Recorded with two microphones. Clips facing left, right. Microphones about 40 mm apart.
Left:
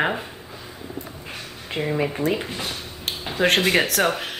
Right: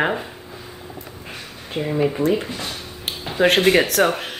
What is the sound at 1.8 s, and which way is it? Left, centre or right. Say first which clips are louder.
Speech: right 1 dB; left.